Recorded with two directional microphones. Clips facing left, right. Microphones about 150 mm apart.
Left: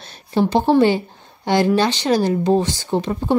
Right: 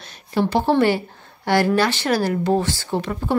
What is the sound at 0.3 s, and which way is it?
A woman's voice, 25° left (ahead or behind).